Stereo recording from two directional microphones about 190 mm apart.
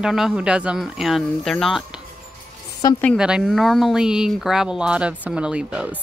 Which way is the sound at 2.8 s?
20° left (ahead or behind).